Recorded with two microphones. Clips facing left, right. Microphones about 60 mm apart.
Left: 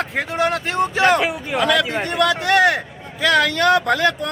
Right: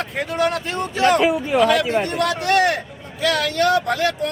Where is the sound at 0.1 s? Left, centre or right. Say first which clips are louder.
Right 2 dB; left.